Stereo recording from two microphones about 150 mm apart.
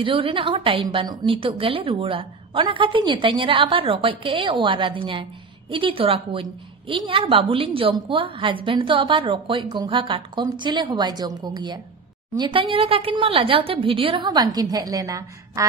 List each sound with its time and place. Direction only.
0.0 s a woman's voice: 35° right (ahead or behind)